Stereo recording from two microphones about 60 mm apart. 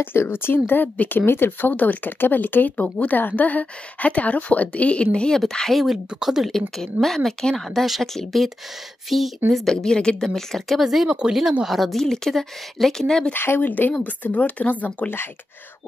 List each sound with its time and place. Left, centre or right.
0.0 s speech: left; by 5.4 s centre
5.4 s a woman's voice: centre
6.0 s speech: centre
6.5 s a woman's voice: centre
9.5 s a woman's voice: centre
13.3 s speech: left